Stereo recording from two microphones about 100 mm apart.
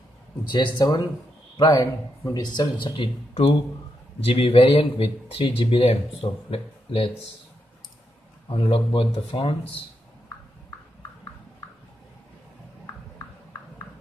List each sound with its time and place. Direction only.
0.5 s speech: 50° left (ahead or behind)
1.6 s speech: 40° left (ahead or behind)
4.2 s speech: 75° left (ahead or behind)
8.5 s speech: 60° left (ahead or behind)